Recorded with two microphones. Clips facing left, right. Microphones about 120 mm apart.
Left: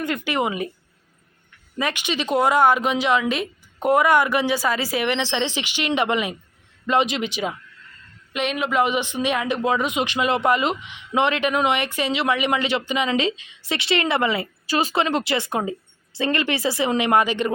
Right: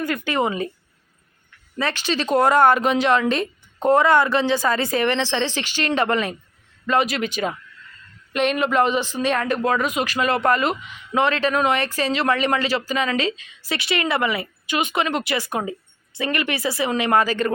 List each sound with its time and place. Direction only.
0.3 s speech: 15° left (ahead or behind)
1.8 s a woman's voice: 15° left (ahead or behind)